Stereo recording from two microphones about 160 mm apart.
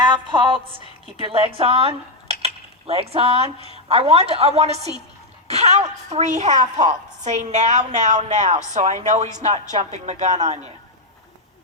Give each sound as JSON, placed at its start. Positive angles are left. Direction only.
{"t": 0.0, "sound": "a woman's voice", "side_deg": -30}